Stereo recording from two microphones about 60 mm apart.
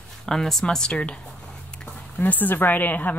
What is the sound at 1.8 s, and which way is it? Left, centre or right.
Speech, left.